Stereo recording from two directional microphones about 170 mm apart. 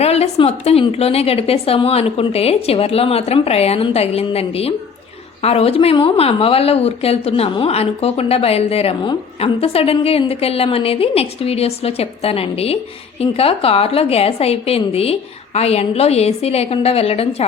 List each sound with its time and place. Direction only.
0.0 s a woman's voice: 40° left (ahead or behind)